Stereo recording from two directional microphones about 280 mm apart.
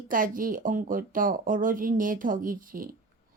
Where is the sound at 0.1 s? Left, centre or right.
Right.